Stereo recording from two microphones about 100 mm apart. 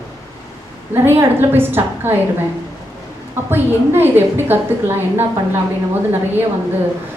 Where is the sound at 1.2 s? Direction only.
20° right (ahead or behind).